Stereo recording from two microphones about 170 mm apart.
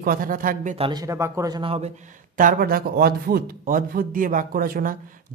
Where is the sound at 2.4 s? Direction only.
55° right (ahead or behind).